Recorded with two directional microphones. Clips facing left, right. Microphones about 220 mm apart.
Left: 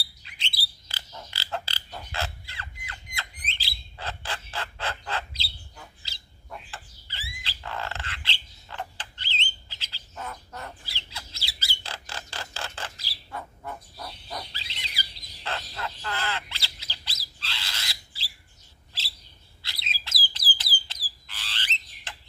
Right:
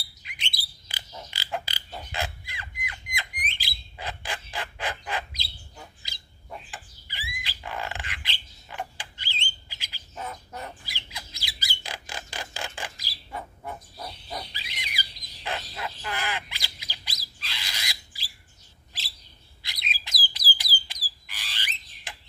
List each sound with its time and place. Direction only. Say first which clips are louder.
0.2 s a sound: right 1 dB; 15° right (ahead or behind)
3.4 s bird: right 1 dB; 15° right (ahead or behind)
19.6 s bird: right 2 dB; 15° right (ahead or behind)
20.3 s alarm: right 1 dB; 10° right (ahead or behind)
20.8 s frog: right 1 dB; 15° right (ahead or behind)